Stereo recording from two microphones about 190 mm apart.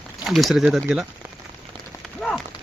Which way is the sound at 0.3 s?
Centre (ahead or behind).